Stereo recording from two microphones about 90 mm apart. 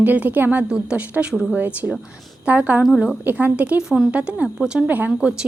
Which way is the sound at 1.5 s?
20° right (ahead or behind).